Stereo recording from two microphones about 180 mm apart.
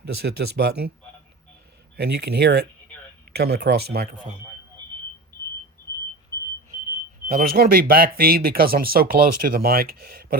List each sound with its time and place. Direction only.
0.0 s speech: 65° right (ahead or behind)
2.0 s speech: 65° right (ahead or behind)
7.3 s speech: 55° right (ahead or behind)